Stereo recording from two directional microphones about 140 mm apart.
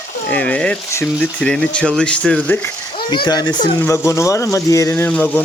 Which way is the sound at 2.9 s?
35° left (ahead or behind).